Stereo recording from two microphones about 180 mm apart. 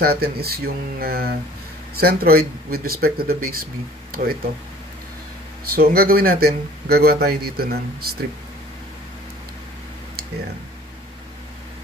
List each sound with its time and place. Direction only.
0.0 s speech: 60° right (ahead or behind)
5.7 s speech: 55° right (ahead or behind)